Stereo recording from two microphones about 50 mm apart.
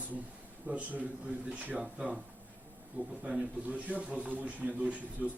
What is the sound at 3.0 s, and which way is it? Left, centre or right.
Speech, right.